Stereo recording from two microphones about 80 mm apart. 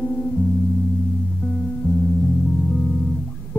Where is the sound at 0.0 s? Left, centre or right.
Centre.